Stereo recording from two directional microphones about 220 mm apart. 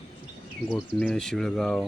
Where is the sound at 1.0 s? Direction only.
Centre (ahead or behind).